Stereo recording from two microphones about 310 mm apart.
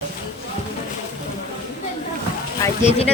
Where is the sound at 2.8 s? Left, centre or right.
Left.